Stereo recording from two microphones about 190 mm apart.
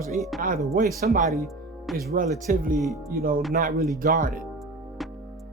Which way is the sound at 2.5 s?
45° right (ahead or behind).